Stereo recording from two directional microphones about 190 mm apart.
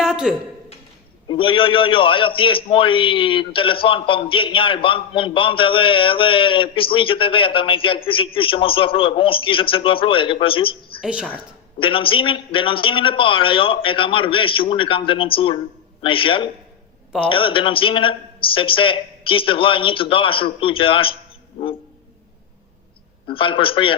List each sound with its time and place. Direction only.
0.0 s a sound: 5° right (ahead or behind)
1.3 s a man's voice: 25° left (ahead or behind)
11.0 s a woman's voice: 5° right (ahead or behind)
11.8 s a man's voice: 30° left (ahead or behind)
21.6 s a sound: 30° left (ahead or behind)
23.2 s a man's voice: 25° left (ahead or behind)